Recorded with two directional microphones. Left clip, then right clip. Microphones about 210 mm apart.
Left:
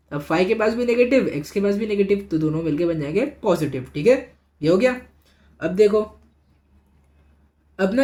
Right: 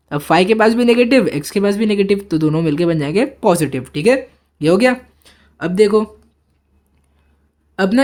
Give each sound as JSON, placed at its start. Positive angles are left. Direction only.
{"t": 0.1, "sound": "speech", "side_deg": -40}
{"t": 7.8, "sound": "speech", "side_deg": -40}